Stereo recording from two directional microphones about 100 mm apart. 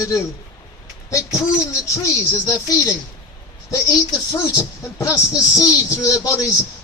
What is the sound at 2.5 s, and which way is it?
A man's voice, 35° left (ahead or behind).